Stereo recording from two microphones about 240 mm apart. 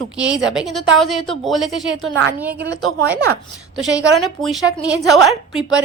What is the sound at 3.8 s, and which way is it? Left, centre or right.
Speech, centre.